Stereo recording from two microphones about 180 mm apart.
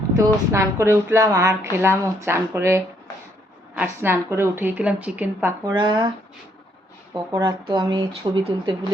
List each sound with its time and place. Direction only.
0.2 s a woman's voice: 15° right (ahead or behind)
5.7 s speech: 25° right (ahead or behind)
7.1 s speech: 20° right (ahead or behind)